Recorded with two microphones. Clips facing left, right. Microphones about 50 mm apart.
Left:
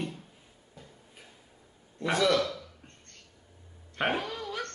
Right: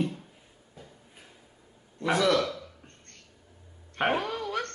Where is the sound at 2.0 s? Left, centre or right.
Centre.